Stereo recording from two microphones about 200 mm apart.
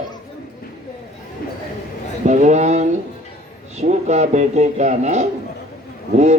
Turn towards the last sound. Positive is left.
turn(degrees=-35)  # may be behind; listen again after turning